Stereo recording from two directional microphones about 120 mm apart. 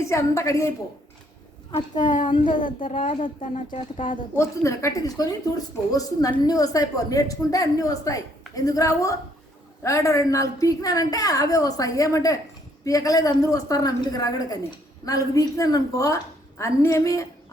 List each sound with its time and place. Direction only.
0.0 s a woman's voice: 25° left (ahead or behind)
1.7 s a woman's voice: 90° left
2.2 s speech: 45° left (ahead or behind)
2.6 s a woman's voice: 90° left
4.4 s a woman's voice: 25° left (ahead or behind)